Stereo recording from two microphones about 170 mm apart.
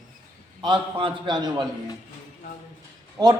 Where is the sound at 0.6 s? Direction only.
30° right (ahead or behind).